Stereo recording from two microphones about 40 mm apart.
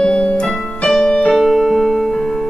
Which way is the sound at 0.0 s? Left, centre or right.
Left.